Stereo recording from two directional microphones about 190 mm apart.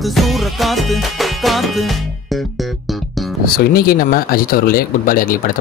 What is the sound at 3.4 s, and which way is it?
Speech, 55° left (ahead or behind).